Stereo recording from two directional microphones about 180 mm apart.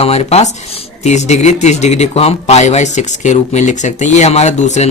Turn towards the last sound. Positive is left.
turn(degrees=40)  # may be behind; listen again after turning